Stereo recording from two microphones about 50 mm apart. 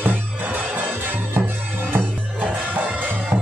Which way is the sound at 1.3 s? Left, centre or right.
Right.